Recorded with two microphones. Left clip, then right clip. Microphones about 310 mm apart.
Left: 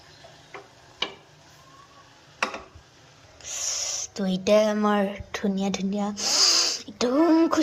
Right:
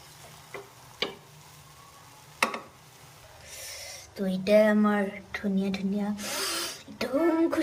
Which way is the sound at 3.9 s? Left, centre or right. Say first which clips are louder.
Left 5 dB; centre.